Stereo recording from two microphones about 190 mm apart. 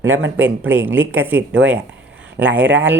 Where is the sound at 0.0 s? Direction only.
90° right.